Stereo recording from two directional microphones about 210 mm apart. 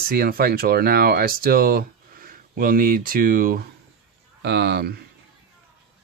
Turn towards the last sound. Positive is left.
turn(degrees=-50)  # may be behind; listen again after turning